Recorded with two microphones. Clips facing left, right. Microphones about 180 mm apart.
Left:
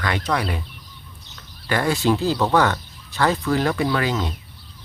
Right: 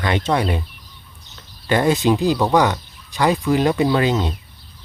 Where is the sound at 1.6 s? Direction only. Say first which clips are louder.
Right 4 dB; 20° right (ahead or behind).